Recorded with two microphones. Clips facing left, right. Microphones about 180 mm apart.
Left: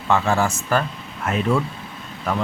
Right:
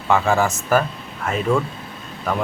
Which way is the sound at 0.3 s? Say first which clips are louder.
Right 3 dB; 15° right (ahead or behind).